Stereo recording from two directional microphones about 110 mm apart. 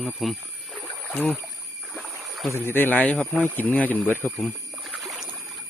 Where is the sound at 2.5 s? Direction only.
20° left (ahead or behind).